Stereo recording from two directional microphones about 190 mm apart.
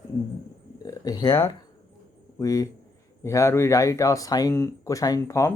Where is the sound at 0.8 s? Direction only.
20° left (ahead or behind).